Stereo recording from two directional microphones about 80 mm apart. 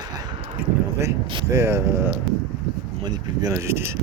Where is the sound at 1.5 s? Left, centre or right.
Right.